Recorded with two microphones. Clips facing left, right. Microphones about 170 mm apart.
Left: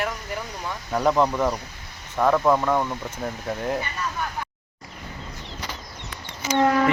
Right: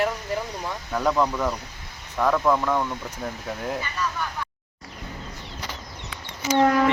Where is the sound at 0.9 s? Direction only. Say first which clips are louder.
Left 2 dB; 15° left (ahead or behind).